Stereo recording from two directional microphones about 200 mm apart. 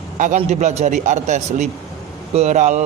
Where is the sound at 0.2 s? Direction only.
40° right (ahead or behind).